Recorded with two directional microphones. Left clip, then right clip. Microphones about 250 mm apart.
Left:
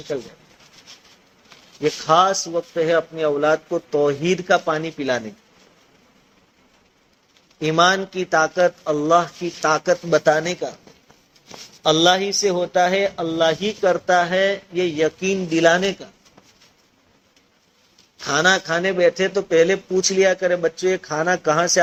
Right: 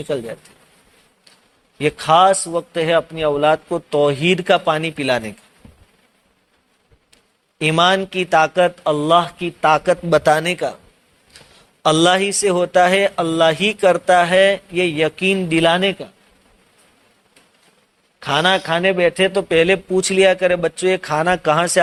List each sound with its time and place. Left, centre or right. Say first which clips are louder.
1.8 s mantra: right 3 dB; right
7.6 s mantra: right 2 dB; right
11.8 s mantra: right 2 dB; right
18.3 s a man's voice: right 2 dB; right
20.1 s mantra: right 4 dB; right